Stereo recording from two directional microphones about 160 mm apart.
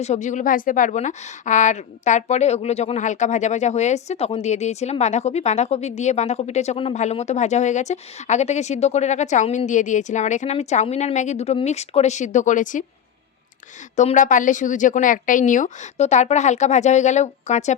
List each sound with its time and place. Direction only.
0.0 s a woman's voice: 45° left (ahead or behind)
13.9 s a woman's voice: 45° left (ahead or behind)